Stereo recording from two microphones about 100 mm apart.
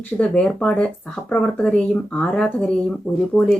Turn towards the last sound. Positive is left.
turn(degrees=10)  # may be behind; listen again after turning